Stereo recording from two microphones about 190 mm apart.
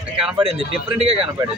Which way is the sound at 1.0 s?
30° right (ahead or behind).